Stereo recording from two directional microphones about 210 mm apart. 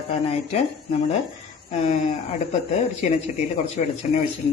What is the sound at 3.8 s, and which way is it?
Speech, 35° left (ahead or behind).